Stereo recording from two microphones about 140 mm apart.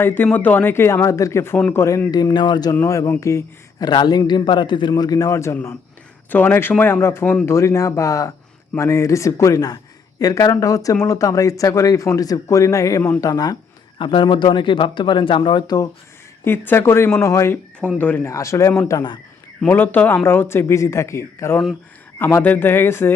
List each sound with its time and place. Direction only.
0.0 s speech: 15° left (ahead or behind)
16.4 s speech: 15° left (ahead or behind)
19.6 s speech: 15° left (ahead or behind)